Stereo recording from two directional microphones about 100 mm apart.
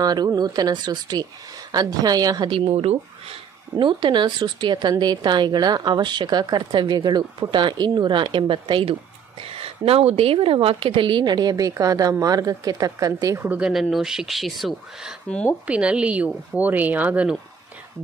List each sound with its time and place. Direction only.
0.0 s speech: 40° right (ahead or behind)
2.5 s speech: 70° right (ahead or behind)
3.8 s a woman's voice: 50° right (ahead or behind)
9.4 s a woman's voice: 75° right (ahead or behind); by 13.5 s 35° right (ahead or behind)
13.5 s speech: 10° right (ahead or behind)
15.6 s speech: 10° right (ahead or behind)